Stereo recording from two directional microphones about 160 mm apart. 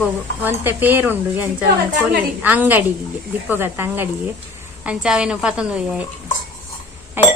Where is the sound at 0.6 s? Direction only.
10° right (ahead or behind).